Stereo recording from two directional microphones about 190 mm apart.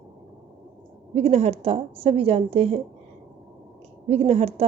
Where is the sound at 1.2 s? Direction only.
35° right (ahead or behind).